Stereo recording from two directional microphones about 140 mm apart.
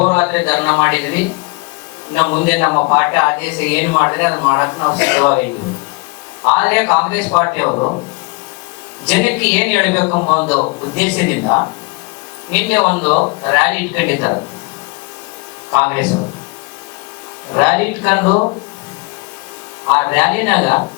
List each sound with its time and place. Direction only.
0.1 s speech: 20° left (ahead or behind)
6.5 s a woman's voice: 15° left (ahead or behind)
7.7 s speech: 30° left (ahead or behind)
9.0 s a woman's voice: 15° left (ahead or behind)
10.1 s speech: 30° left (ahead or behind)
10.9 s a woman's voice: 15° left (ahead or behind)
11.4 s a woman's voice: 25° left (ahead or behind)
15.8 s a woman's voice: 15° left (ahead or behind)
17.5 s speech: 15° left (ahead or behind)
19.9 s a woman's voice: 20° left (ahead or behind)